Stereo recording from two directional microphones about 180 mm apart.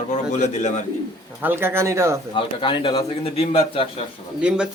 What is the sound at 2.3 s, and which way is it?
A man's voice, 25° left (ahead or behind).